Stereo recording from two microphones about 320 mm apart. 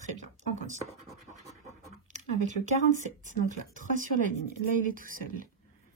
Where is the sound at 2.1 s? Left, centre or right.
Right.